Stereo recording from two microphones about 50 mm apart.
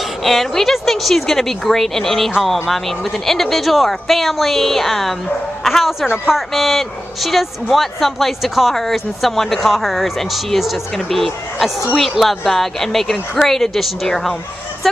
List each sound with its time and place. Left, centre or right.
0.2 s speech: centre